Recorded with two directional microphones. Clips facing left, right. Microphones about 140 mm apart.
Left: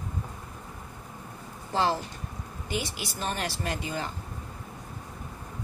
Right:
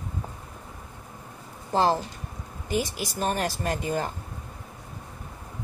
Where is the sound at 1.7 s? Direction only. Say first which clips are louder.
Right 4 dB; 40° right (ahead or behind).